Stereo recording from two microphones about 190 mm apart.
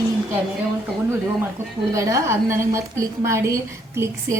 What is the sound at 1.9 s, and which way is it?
A woman's voice, 15° right (ahead or behind).